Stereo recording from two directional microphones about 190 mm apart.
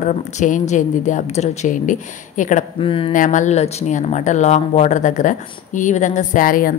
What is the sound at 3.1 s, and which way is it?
A woman's voice, 40° left (ahead or behind).